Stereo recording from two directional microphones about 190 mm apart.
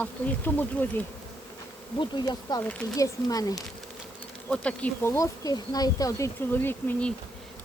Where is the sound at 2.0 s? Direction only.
20° left (ahead or behind).